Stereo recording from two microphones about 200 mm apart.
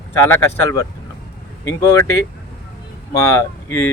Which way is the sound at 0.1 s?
10° left (ahead or behind).